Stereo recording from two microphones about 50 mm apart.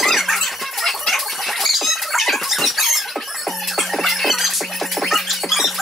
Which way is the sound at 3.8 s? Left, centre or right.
Centre.